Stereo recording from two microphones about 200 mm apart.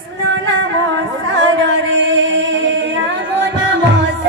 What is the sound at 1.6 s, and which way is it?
Singing, 70° right (ahead or behind).